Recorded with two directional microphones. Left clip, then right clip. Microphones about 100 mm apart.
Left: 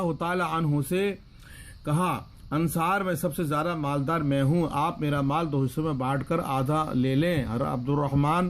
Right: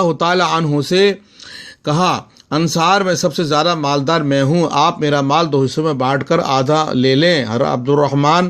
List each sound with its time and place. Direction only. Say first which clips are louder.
0.0 s a man's voice: right 14 dB; 30° right (ahead or behind)